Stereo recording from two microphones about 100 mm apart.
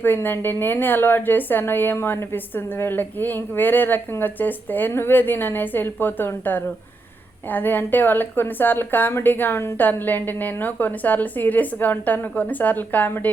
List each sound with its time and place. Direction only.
0.0 s a woman's voice: 20° left (ahead or behind)